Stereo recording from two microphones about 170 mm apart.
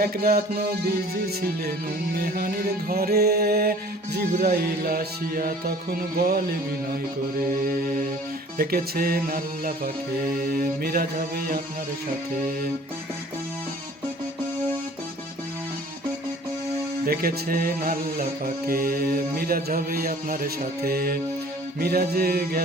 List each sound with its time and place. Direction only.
0.0 s music: 65° right (ahead or behind)
17.1 s music: 60° right (ahead or behind)